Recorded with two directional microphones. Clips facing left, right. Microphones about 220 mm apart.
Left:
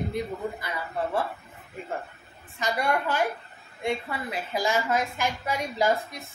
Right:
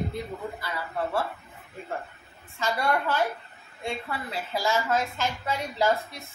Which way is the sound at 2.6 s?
15° left (ahead or behind).